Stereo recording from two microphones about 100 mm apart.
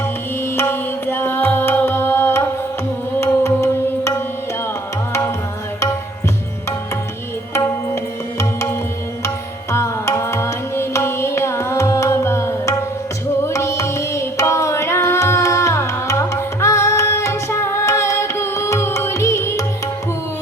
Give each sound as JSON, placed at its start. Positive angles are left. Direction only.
{"t": 0.0, "sound": "music", "side_deg": 20}
{"t": 7.5, "sound": "music", "side_deg": 30}